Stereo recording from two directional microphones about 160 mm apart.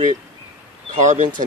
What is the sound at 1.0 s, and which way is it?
Speech, 50° right (ahead or behind).